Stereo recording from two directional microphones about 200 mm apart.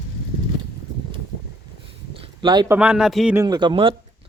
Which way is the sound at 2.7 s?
5° right (ahead or behind).